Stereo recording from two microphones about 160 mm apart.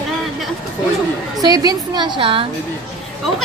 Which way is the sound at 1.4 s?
25° right (ahead or behind).